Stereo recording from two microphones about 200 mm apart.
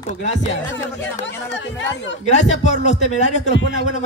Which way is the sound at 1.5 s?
65° left (ahead or behind).